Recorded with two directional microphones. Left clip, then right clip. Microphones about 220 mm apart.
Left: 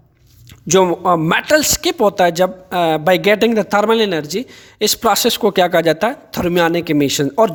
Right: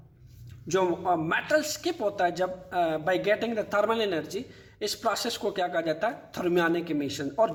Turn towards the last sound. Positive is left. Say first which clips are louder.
# left 12 dB
turn(degrees=55)  # may be behind; listen again after turning